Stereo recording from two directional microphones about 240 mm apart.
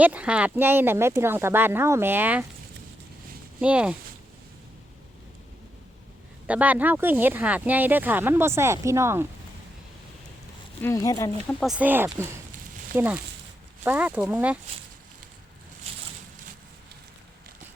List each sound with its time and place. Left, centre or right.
0.0 s speech: centre
3.6 s speech: centre
6.5 s speech: centre
10.8 s speech: centre
11.6 s speech: centre
15.9 s a sound: right